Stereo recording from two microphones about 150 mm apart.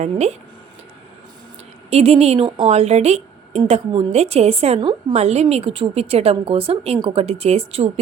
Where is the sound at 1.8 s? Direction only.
45° right (ahead or behind).